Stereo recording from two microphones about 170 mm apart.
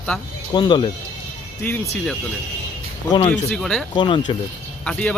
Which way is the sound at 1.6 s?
10° left (ahead or behind).